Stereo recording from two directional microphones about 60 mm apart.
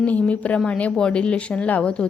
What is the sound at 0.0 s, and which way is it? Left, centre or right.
A woman's voice, left.